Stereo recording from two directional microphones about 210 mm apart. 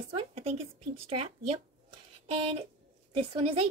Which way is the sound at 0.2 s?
30° right (ahead or behind).